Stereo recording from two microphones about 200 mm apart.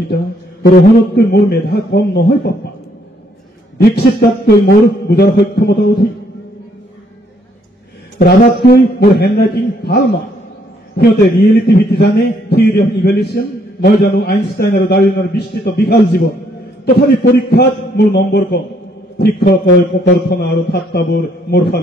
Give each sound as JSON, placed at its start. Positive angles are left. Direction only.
{"t": 0.1, "sound": "a man's voice", "side_deg": 55}
{"t": 3.7, "sound": "a man's voice", "side_deg": 50}
{"t": 8.2, "sound": "a man's voice", "side_deg": 50}
{"t": 11.5, "sound": "a man's voice", "side_deg": 55}